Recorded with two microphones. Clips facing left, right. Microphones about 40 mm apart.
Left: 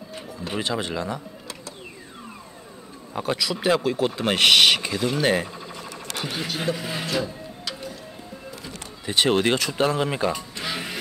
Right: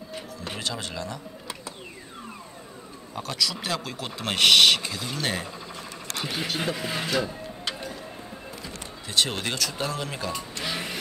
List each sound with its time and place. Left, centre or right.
0.6 s speech: left
3.2 s speech: centre
6.3 s speech: centre
9.0 s speech: left
10.3 s music: centre